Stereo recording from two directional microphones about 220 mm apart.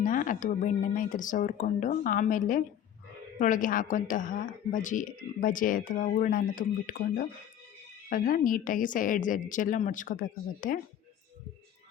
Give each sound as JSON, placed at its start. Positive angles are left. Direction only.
{"t": 0.0, "sound": "a woman's voice", "side_deg": 40}